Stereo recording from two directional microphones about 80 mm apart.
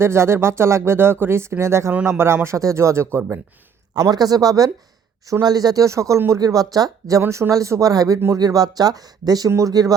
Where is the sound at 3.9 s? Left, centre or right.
Right.